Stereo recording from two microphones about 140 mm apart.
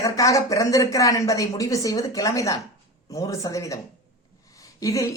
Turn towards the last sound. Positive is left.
turn(degrees=25)  # may be behind; listen again after turning